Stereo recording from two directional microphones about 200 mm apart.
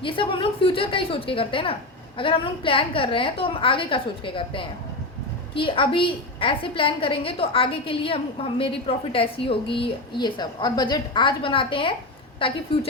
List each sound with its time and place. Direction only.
0.0 s a woman's voice: 25° left (ahead or behind)